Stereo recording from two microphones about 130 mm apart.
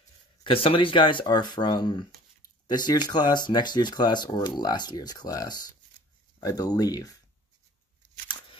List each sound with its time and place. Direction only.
0.4 s speech: 45° left (ahead or behind); by 7.2 s 30° left (ahead or behind)